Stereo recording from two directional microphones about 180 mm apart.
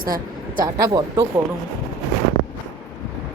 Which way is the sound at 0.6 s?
20° right (ahead or behind).